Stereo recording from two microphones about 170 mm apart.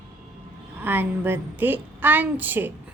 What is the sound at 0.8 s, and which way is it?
Speech, 10° right (ahead or behind).